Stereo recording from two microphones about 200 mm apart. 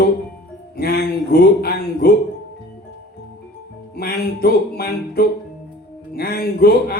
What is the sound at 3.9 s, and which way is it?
A man's voice, 50° left (ahead or behind).